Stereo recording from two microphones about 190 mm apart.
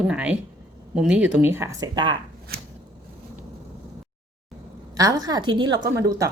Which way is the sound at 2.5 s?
55° right (ahead or behind).